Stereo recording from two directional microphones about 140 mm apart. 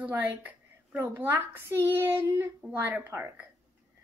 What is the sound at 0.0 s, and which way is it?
A woman's voice, 15° right (ahead or behind).